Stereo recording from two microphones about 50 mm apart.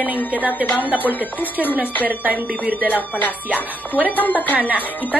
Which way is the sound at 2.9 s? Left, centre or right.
Left.